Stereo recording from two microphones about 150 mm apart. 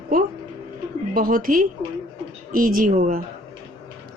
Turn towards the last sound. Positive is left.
turn(degrees=-70)  # may be behind; listen again after turning